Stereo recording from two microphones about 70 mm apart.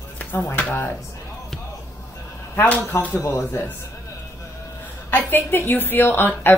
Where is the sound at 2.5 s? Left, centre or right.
Left.